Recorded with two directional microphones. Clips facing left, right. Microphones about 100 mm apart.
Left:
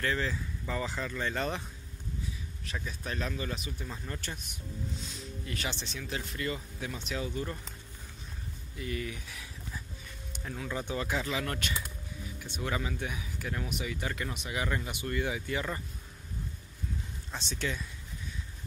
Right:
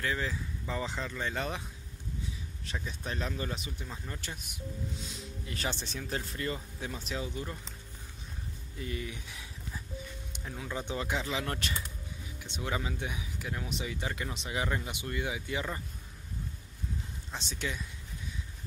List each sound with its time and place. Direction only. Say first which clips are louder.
0.0 s speech: left 2 dB; 10° right (ahead or behind)
2.6 s speech: even; 25° right (ahead or behind)
3.8 s speech: left 2 dB; 5° right (ahead or behind)
5.7 s speech: right 2 dB; 50° right (ahead or behind)
5.9 s speech: right 1 dB; 35° right (ahead or behind)
7.2 s speech: left 3 dB; 15° right (ahead or behind)
8.7 s speech: left 2 dB; 25° right (ahead or behind)
12.5 s speech: left 1 dB; 20° right (ahead or behind)
13.7 s speech: left 1 dB; 25° right (ahead or behind)
17.3 s speech: left 2 dB; 15° right (ahead or behind)